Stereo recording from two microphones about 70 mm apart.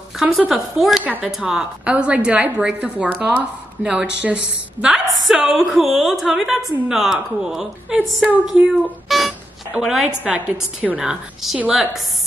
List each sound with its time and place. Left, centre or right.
0.5 s a woman's voice: centre
10.2 s a woman's voice: centre
11.0 s a woman's voice: centre